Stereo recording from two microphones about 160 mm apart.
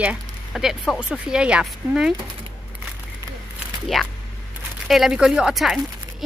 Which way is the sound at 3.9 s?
Centre (ahead or behind).